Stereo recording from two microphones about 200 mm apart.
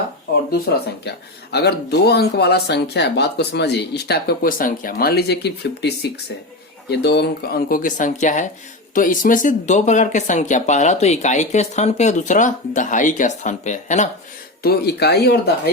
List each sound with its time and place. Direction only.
1.0 s speech: 55° left (ahead or behind); by 14.1 s 35° left (ahead or behind)
14.6 s speech: 50° left (ahead or behind)